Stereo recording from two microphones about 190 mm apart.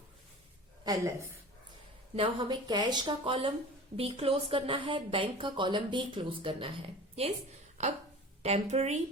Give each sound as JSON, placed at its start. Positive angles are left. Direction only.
{"t": 0.9, "sound": "a woman's voice", "side_deg": -15}